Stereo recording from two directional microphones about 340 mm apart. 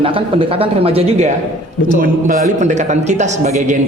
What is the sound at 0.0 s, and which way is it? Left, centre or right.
Speech, centre.